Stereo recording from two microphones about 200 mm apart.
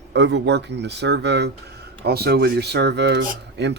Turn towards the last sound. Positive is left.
turn(degrees=-60)  # may be behind; listen again after turning